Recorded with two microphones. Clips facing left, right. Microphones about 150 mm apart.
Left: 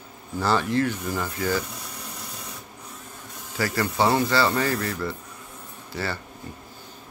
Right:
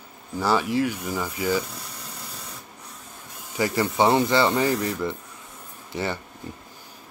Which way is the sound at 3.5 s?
20° right (ahead or behind).